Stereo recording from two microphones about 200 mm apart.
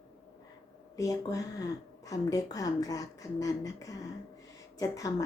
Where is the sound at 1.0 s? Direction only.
15° left (ahead or behind).